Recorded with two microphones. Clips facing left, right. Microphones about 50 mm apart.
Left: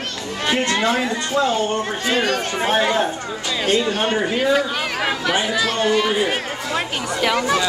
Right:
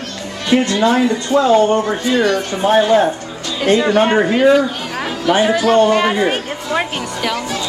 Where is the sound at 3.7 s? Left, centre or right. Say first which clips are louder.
Right 7 dB; right.